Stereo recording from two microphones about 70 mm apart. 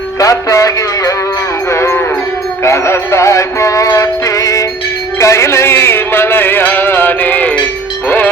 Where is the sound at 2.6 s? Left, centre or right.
Left.